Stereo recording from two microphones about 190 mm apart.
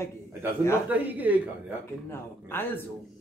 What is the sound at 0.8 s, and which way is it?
Speech, 10° right (ahead or behind).